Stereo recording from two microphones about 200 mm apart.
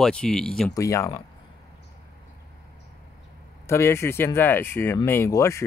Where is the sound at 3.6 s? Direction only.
15° left (ahead or behind).